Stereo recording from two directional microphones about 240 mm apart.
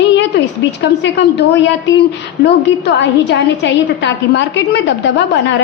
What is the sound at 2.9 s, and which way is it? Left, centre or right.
A woman's voice, left.